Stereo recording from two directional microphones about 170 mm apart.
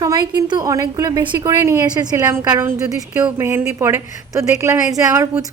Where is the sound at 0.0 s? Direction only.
25° right (ahead or behind).